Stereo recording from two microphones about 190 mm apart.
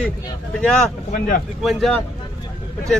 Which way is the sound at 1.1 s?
50° left (ahead or behind).